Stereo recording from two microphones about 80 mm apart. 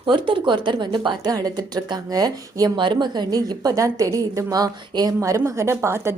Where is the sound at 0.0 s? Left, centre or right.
Right.